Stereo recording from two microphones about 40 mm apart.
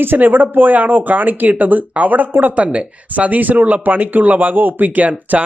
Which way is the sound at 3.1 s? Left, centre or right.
Right.